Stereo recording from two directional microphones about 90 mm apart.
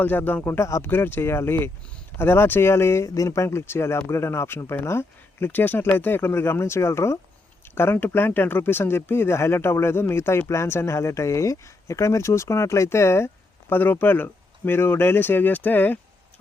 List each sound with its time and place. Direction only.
0.0 s speech: 20° left (ahead or behind)